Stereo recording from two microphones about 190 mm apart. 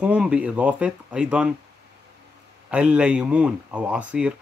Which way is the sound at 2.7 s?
5° right (ahead or behind).